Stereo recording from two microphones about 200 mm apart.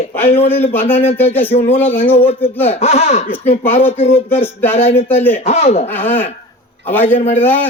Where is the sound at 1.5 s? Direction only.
30° left (ahead or behind).